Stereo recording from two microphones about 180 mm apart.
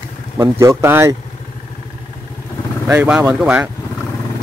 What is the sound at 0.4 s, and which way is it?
Speech, 15° right (ahead or behind).